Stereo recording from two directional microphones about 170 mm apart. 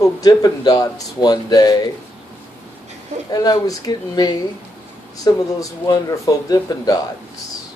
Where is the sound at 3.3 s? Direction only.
20° left (ahead or behind).